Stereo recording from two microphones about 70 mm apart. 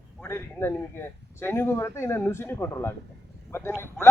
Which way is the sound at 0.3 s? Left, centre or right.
Left.